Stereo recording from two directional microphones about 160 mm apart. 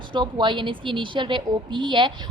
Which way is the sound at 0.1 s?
30° right (ahead or behind).